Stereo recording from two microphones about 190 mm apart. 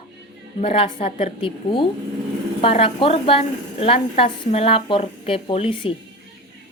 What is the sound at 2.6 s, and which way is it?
A woman's voice, 30° left (ahead or behind).